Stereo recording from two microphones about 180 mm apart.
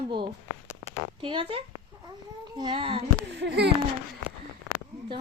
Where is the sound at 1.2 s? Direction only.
30° right (ahead or behind).